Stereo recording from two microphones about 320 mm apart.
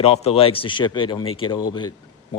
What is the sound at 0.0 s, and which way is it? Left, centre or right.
Speech, centre.